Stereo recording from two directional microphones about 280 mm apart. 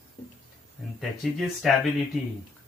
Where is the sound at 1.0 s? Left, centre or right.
Centre.